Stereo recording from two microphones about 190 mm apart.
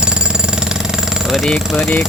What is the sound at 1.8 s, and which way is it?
Speech, 10° left (ahead or behind).